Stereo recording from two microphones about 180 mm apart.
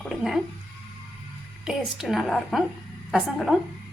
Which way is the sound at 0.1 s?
Centre (ahead or behind).